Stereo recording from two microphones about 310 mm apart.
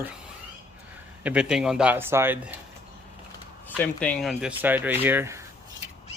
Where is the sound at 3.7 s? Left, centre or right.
Centre.